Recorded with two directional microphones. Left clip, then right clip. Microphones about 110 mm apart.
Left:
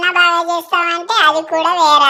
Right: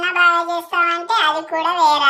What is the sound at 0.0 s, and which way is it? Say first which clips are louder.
Speech: left 3 dB; 35° left (ahead or behind).